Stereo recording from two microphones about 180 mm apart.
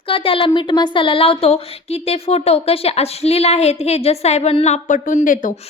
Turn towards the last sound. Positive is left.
turn(degrees=45)  # may be behind; listen again after turning